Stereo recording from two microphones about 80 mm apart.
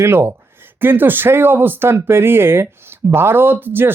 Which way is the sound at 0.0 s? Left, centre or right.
Right.